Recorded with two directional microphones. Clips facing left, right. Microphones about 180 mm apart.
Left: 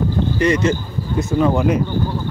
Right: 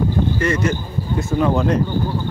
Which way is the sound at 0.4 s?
20° left (ahead or behind).